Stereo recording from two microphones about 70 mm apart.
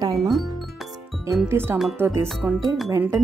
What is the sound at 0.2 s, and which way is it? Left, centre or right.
Music, centre.